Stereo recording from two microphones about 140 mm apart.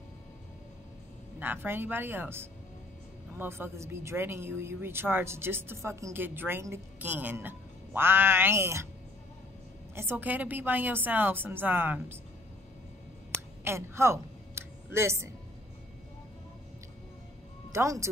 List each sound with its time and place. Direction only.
1.4 s speech: 15° right (ahead or behind)
9.9 s speech: 15° right (ahead or behind)
13.7 s a sound: 20° right (ahead or behind)
17.7 s speech: 20° right (ahead or behind)